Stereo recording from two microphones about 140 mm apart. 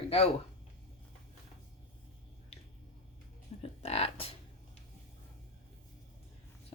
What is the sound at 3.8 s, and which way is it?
Music, 45° left (ahead or behind).